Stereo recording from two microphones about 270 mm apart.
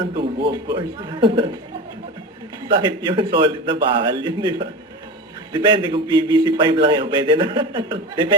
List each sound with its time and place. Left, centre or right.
0.3 s a man's voice: centre
2.6 s a man's voice: centre